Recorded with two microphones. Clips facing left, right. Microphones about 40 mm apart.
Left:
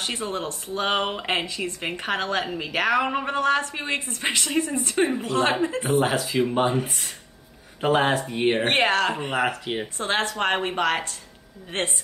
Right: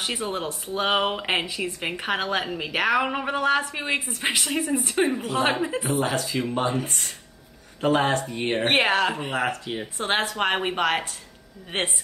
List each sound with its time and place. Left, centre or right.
0.0 s speech: centre
6.1 s speech: centre
6.7 s speech: centre
8.4 s speech: centre
8.6 s speech: centre
9.5 s speech: centre
9.9 s a woman's voice: centre